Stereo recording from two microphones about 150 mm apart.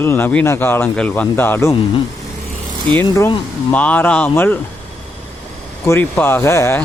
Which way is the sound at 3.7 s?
10° left (ahead or behind).